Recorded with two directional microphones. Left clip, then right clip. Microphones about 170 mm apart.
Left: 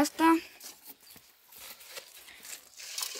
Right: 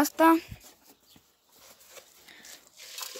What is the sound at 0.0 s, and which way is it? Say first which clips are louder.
Speech: right 3 dB; 25° right (ahead or behind).